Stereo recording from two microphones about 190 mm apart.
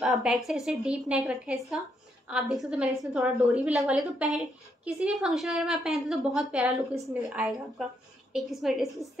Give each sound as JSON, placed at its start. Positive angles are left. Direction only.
{"t": 0.0, "sound": "a woman's voice", "side_deg": 0}